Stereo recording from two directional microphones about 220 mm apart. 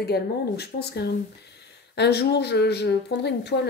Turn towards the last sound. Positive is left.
turn(degrees=50)  # may be behind; listen again after turning